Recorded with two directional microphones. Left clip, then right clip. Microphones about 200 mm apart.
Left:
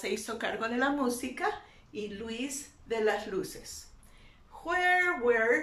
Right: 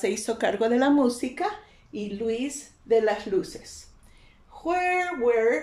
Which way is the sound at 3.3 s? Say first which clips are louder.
Right 8 dB; 25° right (ahead or behind).